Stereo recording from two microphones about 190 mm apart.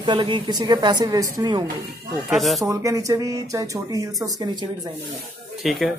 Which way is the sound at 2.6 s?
15° right (ahead or behind).